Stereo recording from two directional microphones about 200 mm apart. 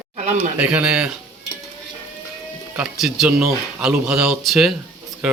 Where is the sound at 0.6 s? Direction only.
5° right (ahead or behind).